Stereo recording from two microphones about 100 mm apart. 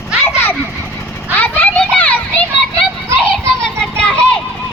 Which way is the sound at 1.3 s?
20° left (ahead or behind).